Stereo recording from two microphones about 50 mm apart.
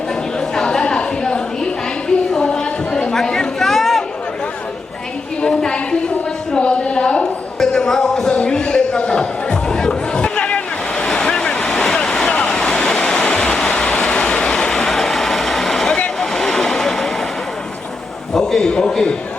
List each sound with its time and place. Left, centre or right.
0.3 s a sound: centre
2.3 s chatter: centre
5.4 s a sound: centre
8.4 s music: centre
11.0 s vehicle: centre
12.3 s waves: centre
13.7 s vehicle: left
18.3 s a man's voice: centre